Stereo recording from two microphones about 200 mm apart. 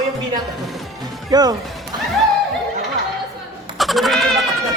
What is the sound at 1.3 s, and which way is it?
Speech, 20° right (ahead or behind).